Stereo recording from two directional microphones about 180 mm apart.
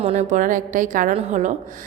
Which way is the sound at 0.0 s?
40° right (ahead or behind).